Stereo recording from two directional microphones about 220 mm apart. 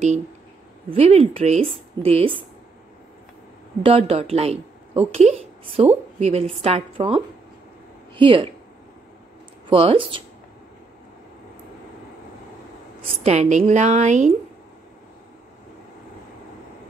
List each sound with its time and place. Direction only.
0.8 s speech: 30° right (ahead or behind)
3.8 s speech: 25° right (ahead or behind)
9.7 s speech: 25° right (ahead or behind)
13.2 s a woman's voice: 30° right (ahead or behind)